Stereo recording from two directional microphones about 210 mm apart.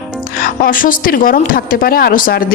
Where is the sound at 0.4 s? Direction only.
40° left (ahead or behind).